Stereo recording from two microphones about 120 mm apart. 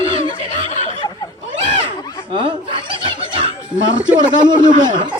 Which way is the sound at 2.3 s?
45° right (ahead or behind).